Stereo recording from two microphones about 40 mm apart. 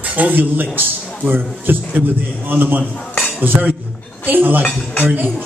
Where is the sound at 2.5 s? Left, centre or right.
Right.